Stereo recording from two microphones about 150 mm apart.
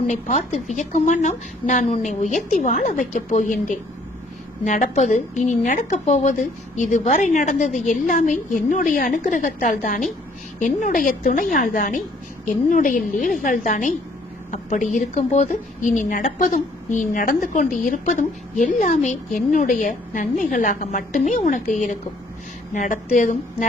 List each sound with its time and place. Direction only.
0.1 s a woman's voice: 50° left (ahead or behind)
4.6 s a woman's voice: 55° left (ahead or behind)